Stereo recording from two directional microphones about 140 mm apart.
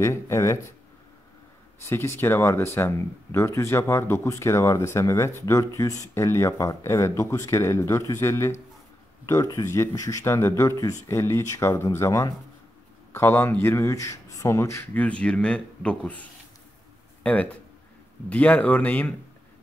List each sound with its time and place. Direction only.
0.0 s speech: 20° left (ahead or behind)
1.9 s a man's voice: 20° left (ahead or behind)